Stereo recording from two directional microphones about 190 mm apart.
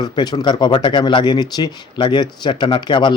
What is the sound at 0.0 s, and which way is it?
Speech, 20° left (ahead or behind).